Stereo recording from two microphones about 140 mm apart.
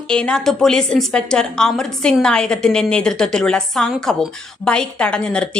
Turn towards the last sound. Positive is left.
turn(degrees=5)  # may be behind; listen again after turning